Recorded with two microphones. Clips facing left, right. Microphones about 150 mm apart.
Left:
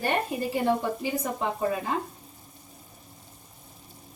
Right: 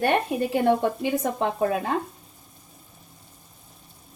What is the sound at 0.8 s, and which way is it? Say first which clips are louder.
Speech: right 5 dB; 70° right (ahead or behind).